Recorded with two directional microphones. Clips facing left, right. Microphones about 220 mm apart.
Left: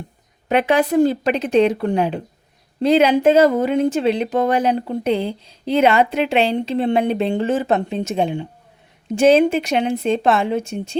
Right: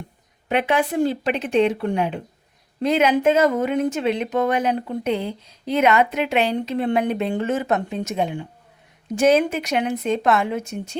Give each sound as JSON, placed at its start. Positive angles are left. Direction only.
{"t": 0.4, "sound": "speech", "side_deg": 40}